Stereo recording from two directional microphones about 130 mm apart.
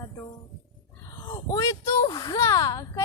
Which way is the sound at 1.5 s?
25° left (ahead or behind).